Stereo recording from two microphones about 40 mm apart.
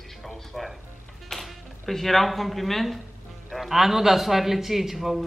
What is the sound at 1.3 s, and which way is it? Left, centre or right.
A woman's voice, centre.